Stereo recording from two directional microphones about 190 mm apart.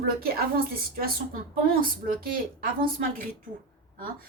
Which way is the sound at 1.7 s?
50° right (ahead or behind).